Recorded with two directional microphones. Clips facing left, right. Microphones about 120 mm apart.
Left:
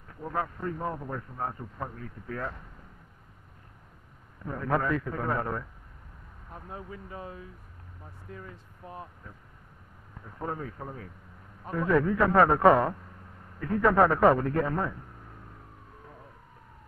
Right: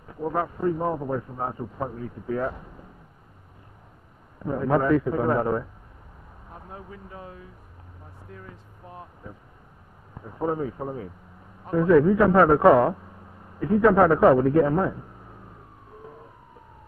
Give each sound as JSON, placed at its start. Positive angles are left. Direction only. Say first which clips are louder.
{"t": 0.1, "sound": "a man's voice", "louder": "right 6 dB", "side_deg": -15}
{"t": 4.4, "sound": "a man's voice", "louder": "right 6 dB", "side_deg": -15}
{"t": 9.2, "sound": "a man's voice", "louder": "right 6 dB", "side_deg": -10}